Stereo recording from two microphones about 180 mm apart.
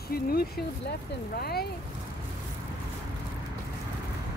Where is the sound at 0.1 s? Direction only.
60° left (ahead or behind).